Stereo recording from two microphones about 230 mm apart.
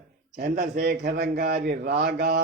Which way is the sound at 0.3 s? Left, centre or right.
Right.